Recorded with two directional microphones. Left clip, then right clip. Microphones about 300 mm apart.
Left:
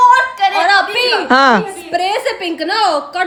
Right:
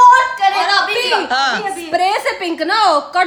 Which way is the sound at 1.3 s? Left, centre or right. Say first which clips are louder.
Left 11 dB; left.